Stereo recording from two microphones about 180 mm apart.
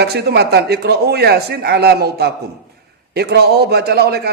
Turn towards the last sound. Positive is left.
turn(degrees=-60)  # may be behind; listen again after turning